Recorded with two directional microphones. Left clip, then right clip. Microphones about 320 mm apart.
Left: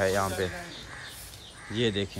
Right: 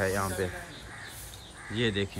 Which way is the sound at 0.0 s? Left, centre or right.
Centre.